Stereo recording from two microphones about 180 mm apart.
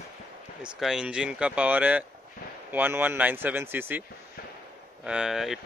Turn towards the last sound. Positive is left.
turn(degrees=0)  # may be behind; listen again after turning